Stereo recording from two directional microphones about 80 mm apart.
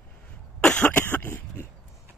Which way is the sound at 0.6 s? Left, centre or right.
Centre.